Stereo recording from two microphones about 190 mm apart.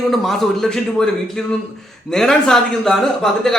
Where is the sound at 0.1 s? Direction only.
Centre (ahead or behind).